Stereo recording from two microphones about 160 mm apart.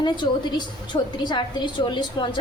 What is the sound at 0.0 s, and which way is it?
A woman's voice, 30° left (ahead or behind).